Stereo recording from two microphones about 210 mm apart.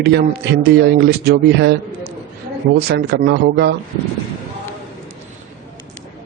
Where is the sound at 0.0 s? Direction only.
55° right (ahead or behind).